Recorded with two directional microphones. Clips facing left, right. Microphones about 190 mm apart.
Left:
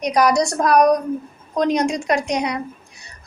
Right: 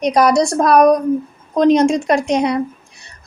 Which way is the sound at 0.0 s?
30° right (ahead or behind).